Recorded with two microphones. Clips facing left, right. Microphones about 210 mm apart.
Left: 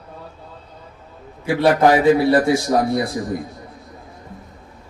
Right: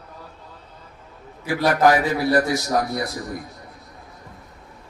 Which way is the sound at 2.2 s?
30° left (ahead or behind).